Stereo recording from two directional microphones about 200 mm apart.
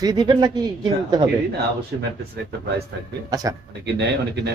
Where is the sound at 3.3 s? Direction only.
20° right (ahead or behind).